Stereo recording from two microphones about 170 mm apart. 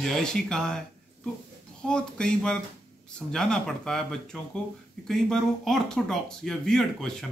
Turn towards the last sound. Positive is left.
turn(degrees=5)  # may be behind; listen again after turning